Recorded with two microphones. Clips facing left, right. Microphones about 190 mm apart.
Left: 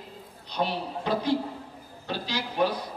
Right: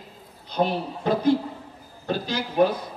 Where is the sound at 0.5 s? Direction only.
50° right (ahead or behind).